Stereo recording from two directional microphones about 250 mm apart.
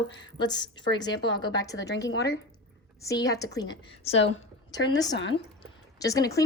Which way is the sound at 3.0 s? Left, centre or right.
Centre.